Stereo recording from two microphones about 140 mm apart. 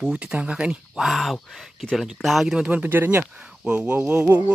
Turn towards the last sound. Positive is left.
turn(degrees=-10)  # may be behind; listen again after turning